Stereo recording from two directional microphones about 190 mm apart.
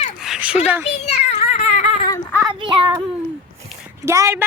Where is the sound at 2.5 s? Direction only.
25° right (ahead or behind).